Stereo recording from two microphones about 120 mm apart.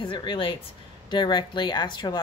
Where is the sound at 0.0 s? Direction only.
45° left (ahead or behind).